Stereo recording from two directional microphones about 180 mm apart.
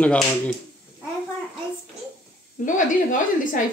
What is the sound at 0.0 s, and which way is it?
Speech, 5° left (ahead or behind).